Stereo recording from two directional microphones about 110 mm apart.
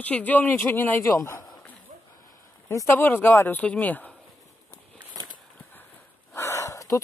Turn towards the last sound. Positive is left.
turn(degrees=30)  # may be behind; listen again after turning